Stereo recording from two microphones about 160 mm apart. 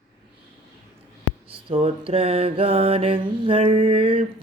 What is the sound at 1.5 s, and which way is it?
Mantra, 35° right (ahead or behind).